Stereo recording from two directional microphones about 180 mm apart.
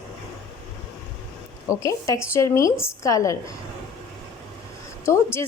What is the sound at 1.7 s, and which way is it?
A woman's voice, 20° left (ahead or behind).